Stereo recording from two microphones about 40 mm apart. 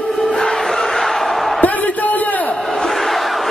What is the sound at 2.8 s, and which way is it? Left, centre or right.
Battle cry, centre.